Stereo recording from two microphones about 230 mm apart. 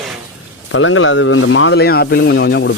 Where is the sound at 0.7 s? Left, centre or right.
Left.